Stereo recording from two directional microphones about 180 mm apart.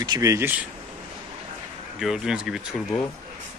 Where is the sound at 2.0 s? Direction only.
5° right (ahead or behind).